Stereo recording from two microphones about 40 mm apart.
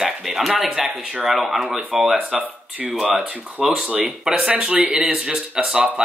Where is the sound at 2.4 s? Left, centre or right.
Right.